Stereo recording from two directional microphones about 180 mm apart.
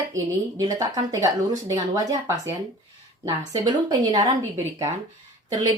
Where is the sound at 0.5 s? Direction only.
20° right (ahead or behind).